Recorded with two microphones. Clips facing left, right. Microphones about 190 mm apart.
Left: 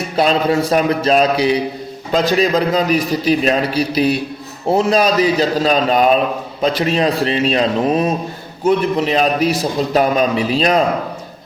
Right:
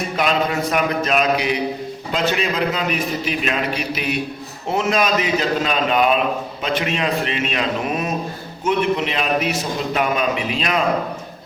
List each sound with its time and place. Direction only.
0.2 s a man's voice: 30° left (ahead or behind)